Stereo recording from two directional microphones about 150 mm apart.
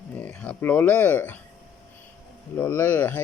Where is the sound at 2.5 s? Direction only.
15° left (ahead or behind).